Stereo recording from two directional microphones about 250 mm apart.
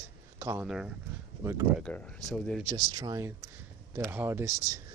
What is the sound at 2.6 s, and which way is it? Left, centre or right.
Speech, centre.